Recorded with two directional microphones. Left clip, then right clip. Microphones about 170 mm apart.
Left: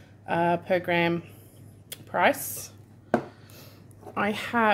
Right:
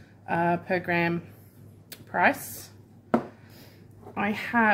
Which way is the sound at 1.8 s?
20° left (ahead or behind).